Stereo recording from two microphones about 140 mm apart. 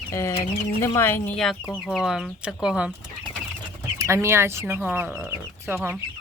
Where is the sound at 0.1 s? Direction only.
20° left (ahead or behind); by 2.9 s 5° right (ahead or behind).